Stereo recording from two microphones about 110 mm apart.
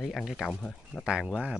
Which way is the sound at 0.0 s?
Centre (ahead or behind).